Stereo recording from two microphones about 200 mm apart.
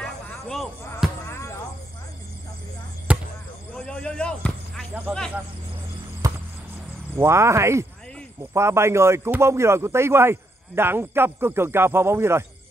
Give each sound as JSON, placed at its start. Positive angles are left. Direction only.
{"t": 0.0, "sound": "basketball bounce", "side_deg": 5}
{"t": 1.3, "sound": "basketball bounce", "side_deg": 15}
{"t": 3.1, "sound": "basketball bounce", "side_deg": -5}
{"t": 3.7, "sound": "basketball bounce", "side_deg": 5}
{"t": 4.9, "sound": "a man's voice", "side_deg": 0}
{"t": 6.2, "sound": "music", "side_deg": -15}
{"t": 7.2, "sound": "a man's voice", "side_deg": -15}